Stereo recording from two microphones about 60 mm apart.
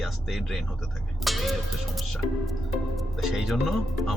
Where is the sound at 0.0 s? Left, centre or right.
Centre.